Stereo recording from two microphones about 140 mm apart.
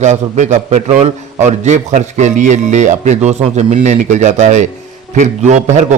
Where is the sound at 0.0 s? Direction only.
55° right (ahead or behind).